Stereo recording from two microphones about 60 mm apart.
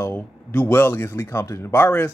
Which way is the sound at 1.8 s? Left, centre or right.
Left.